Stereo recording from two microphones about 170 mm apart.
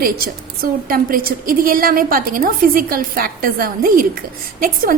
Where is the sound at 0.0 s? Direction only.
60° right (ahead or behind).